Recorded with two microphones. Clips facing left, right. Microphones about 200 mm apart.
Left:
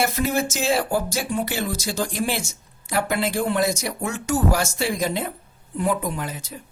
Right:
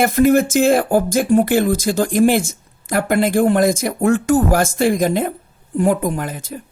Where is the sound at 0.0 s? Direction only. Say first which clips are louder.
Right 10 dB; 50° right (ahead or behind).